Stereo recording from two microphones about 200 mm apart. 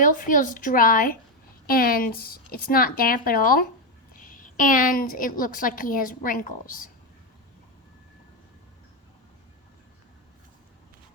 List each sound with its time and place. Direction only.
0.0 s a woman's voice: 40° left (ahead or behind)